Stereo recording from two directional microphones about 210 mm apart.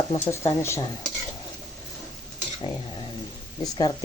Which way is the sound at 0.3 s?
10° left (ahead or behind).